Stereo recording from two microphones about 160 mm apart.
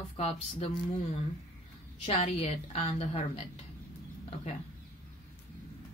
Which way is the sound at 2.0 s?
40° left (ahead or behind).